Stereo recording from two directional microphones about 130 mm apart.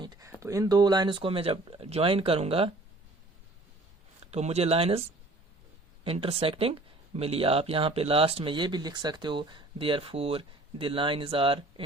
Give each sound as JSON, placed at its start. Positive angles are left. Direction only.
{"t": 0.0, "sound": "a sound", "side_deg": -35}
{"t": 0.3, "sound": "speech", "side_deg": -25}
{"t": 4.3, "sound": "speech", "side_deg": -55}
{"t": 6.1, "sound": "speech", "side_deg": -45}